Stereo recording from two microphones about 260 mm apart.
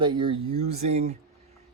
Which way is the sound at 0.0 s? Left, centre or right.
Centre.